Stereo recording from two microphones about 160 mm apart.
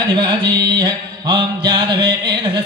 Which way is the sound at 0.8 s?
25° right (ahead or behind).